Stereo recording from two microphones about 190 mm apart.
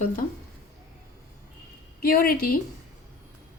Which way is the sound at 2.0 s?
50° left (ahead or behind).